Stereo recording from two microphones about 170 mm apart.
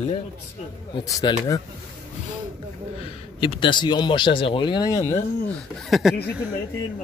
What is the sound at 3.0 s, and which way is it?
Speech, 30° left (ahead or behind).